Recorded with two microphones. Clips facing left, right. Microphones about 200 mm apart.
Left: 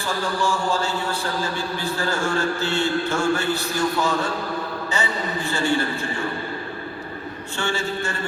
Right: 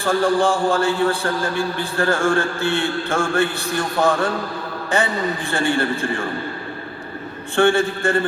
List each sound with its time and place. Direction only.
0.0 s a man's voice: 55° right (ahead or behind)
5.5 s a man's voice: 55° right (ahead or behind)
7.5 s a man's voice: 55° right (ahead or behind)